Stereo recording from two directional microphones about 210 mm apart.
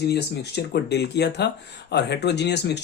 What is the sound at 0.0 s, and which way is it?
Speech, 50° left (ahead or behind).